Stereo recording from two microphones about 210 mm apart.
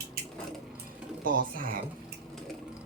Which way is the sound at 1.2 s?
40° right (ahead or behind).